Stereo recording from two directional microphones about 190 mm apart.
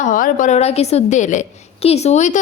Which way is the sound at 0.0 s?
45° left (ahead or behind).